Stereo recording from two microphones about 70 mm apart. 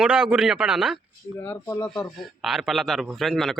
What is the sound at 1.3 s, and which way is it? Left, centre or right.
Speech, left.